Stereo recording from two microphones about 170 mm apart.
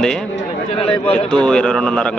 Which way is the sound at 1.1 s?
5° left (ahead or behind).